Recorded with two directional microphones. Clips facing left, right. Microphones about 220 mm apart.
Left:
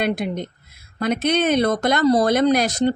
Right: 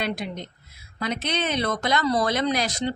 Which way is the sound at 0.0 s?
50° left (ahead or behind).